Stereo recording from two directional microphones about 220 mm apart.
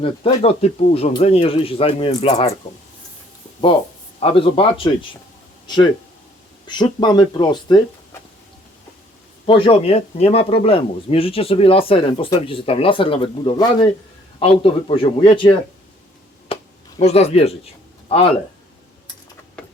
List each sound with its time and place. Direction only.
0.0 s speech: 25° left (ahead or behind)
4.2 s speech: 25° left (ahead or behind)
9.5 s speech: 25° left (ahead or behind)
17.0 s speech: 30° left (ahead or behind)